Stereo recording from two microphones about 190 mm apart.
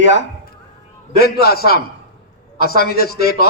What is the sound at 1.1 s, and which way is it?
A man's voice, 55° left (ahead or behind).